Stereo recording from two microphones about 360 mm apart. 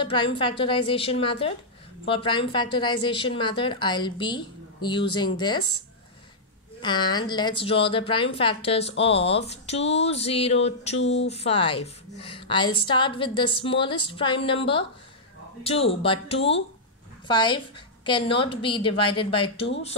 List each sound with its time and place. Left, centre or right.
0.0 s a woman's voice: centre
6.8 s a woman's voice: centre
11.0 s a sound: left
11.2 s a woman's voice: centre